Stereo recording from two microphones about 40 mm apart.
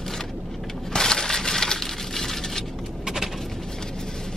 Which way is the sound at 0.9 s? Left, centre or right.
Centre.